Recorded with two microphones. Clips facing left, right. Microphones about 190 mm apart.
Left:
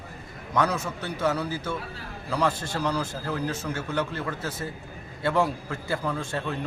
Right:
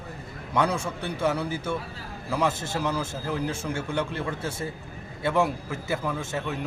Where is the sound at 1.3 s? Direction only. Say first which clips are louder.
Right 1 dB; 25° right (ahead or behind).